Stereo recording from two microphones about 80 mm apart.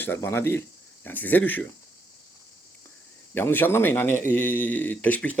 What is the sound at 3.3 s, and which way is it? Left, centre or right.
Speech, left.